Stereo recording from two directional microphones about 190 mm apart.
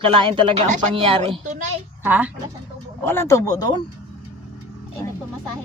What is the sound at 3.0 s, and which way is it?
Speech, 10° left (ahead or behind).